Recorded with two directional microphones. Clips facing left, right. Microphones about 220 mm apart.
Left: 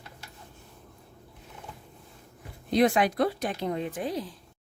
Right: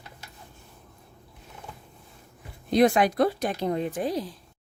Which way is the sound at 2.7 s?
45° right (ahead or behind).